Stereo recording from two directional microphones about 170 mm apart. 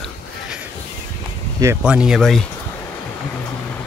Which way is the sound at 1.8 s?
5° right (ahead or behind).